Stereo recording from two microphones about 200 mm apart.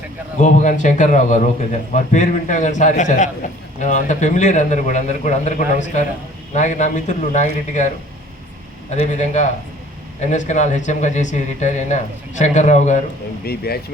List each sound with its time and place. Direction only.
0.4 s a man's voice: 35° left (ahead or behind)
9.0 s a man's voice: 35° left (ahead or behind)
13.4 s speech: 50° left (ahead or behind)